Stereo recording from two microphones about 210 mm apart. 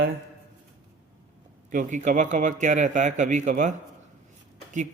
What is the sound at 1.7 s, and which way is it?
A man's voice, 40° right (ahead or behind).